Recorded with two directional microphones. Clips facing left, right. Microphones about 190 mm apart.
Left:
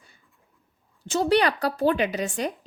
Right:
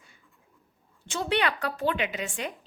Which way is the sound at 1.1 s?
40° left (ahead or behind).